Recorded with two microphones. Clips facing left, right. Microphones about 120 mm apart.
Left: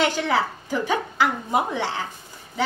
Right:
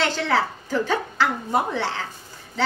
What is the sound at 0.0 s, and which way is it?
A woman's voice, 15° left (ahead or behind).